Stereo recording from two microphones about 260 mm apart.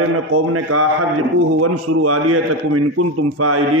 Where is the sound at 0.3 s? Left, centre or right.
Right.